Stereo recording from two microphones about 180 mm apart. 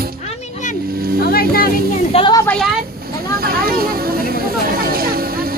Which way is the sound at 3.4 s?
55° right (ahead or behind).